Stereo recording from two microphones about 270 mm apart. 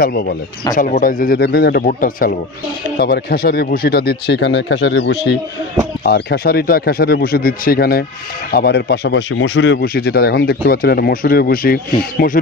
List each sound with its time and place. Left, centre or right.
0.0 s speech: left